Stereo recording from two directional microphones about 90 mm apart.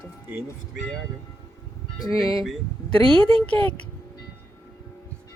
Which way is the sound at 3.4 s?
15° left (ahead or behind).